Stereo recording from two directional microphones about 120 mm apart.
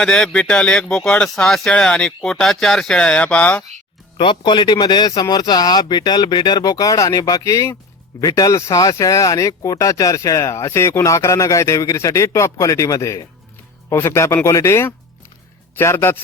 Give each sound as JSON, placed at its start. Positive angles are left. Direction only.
{"t": 0.0, "sound": "speech", "side_deg": 5}
{"t": 4.2, "sound": "speech", "side_deg": 45}